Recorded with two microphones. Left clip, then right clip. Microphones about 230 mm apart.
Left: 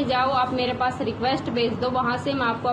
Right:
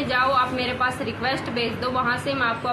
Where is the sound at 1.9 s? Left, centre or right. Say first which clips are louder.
Right 1 dB; right.